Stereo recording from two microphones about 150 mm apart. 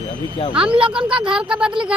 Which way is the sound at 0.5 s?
5° right (ahead or behind).